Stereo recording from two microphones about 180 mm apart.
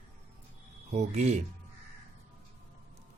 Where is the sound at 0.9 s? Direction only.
40° right (ahead or behind).